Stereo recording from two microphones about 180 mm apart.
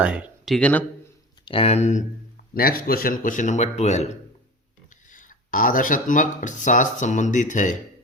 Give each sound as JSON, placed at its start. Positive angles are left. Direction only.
{"t": 0.0, "sound": "speech", "side_deg": -5}
{"t": 1.5, "sound": "speech", "side_deg": 30}
{"t": 2.6, "sound": "a man's voice", "side_deg": 55}